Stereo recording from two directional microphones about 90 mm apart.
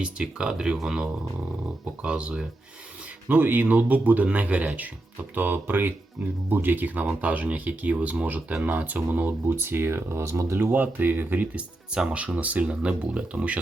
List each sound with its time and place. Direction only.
0.0 s speech: 10° right (ahead or behind)
3.2 s speech: 20° right (ahead or behind)